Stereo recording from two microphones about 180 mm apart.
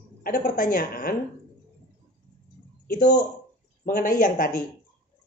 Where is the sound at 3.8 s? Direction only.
50° left (ahead or behind).